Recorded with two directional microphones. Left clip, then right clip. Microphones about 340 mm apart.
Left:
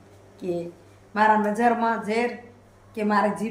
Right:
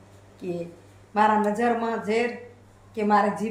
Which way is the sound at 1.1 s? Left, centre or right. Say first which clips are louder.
Left 1 dB; centre.